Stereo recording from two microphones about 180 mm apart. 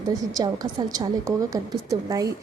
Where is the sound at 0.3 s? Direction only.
20° right (ahead or behind).